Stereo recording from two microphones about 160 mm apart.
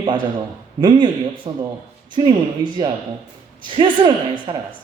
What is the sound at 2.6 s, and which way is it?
A woman's voice, 30° right (ahead or behind).